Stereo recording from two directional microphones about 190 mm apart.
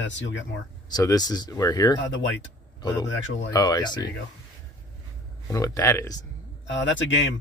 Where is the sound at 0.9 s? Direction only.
20° left (ahead or behind).